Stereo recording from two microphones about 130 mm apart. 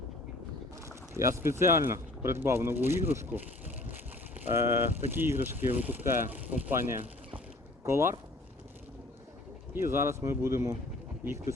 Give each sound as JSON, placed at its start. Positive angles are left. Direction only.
{"t": 0.9, "sound": "speech", "side_deg": -20}
{"t": 4.5, "sound": "speech", "side_deg": -20}
{"t": 7.0, "sound": "a sound", "side_deg": -40}
{"t": 7.9, "sound": "speech", "side_deg": -20}
{"t": 9.7, "sound": "speech", "side_deg": -20}